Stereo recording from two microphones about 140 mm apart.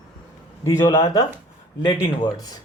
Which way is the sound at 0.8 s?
35° left (ahead or behind).